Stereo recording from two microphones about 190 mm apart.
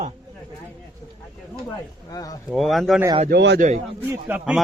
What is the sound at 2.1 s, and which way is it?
Speech, 20° left (ahead or behind).